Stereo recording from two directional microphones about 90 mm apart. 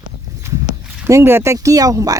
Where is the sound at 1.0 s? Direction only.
30° right (ahead or behind).